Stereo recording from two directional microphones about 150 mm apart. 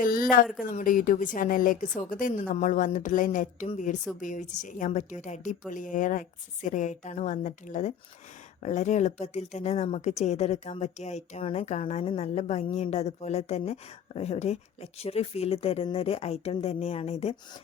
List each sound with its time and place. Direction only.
0.0 s speech: 70° left (ahead or behind)
0.6 s a woman's voice: 60° left (ahead or behind); by 17.3 s 45° left (ahead or behind)